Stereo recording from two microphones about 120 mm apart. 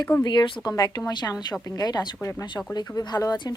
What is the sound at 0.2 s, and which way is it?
Speech, 40° left (ahead or behind).